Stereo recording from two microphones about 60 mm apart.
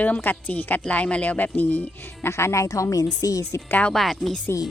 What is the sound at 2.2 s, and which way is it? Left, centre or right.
A woman's voice, left.